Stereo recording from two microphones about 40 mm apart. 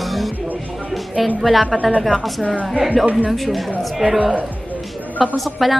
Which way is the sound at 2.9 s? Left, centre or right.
Right.